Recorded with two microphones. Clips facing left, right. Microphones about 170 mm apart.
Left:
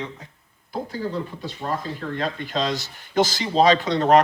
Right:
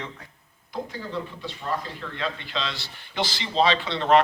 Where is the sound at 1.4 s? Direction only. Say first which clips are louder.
Left 3 dB; 40° left (ahead or behind).